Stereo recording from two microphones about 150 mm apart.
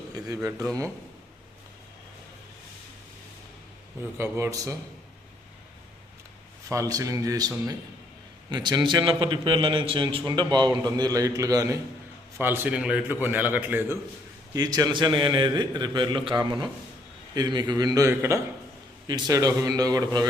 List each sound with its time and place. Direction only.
4.2 s a man's voice: 20° right (ahead or behind)
6.7 s a man's voice: 20° right (ahead or behind)
14.5 s a man's voice: 25° right (ahead or behind)